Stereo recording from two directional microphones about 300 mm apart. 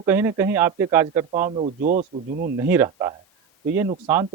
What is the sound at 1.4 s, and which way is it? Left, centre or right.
Speech, right.